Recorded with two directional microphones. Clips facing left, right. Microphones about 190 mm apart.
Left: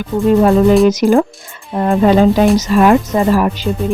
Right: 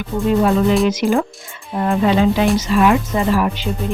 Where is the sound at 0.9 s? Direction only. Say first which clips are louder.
Left 6 dB; 40° left (ahead or behind).